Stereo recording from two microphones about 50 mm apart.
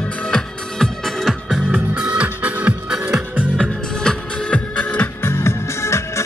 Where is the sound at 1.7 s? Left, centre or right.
Right.